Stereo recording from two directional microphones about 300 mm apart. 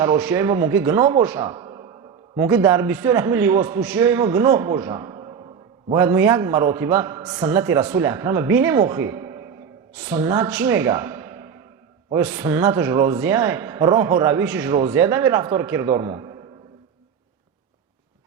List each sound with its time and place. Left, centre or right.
0.0 s speech: centre